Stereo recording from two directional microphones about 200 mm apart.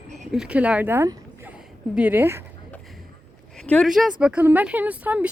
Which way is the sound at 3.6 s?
5° left (ahead or behind).